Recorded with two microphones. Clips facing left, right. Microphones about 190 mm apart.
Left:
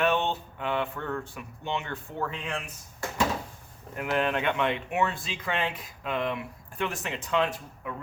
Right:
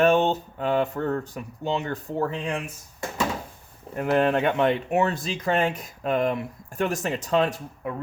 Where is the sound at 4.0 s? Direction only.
35° right (ahead or behind).